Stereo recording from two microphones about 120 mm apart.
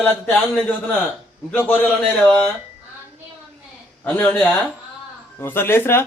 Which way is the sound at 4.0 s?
15° left (ahead or behind).